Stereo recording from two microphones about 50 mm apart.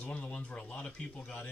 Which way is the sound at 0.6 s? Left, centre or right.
Left.